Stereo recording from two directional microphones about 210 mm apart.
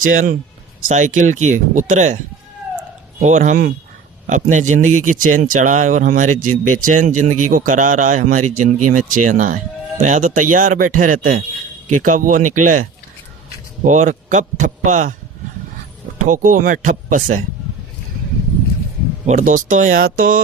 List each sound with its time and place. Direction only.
0.0 s speech: 40° right (ahead or behind)
3.2 s speech: 35° right (ahead or behind)
16.1 s speech: 35° right (ahead or behind)
19.2 s speech: 35° right (ahead or behind)